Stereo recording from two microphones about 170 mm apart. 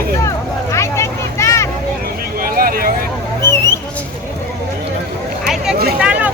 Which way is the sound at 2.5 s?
60° right (ahead or behind).